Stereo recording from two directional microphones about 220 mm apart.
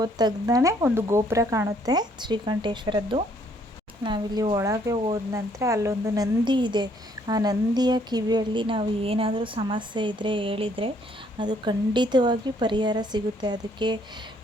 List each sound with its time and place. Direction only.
0.0 s speech: 20° right (ahead or behind)